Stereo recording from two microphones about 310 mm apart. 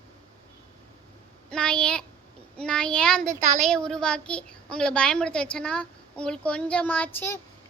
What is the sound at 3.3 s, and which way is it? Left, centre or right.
Speech, right.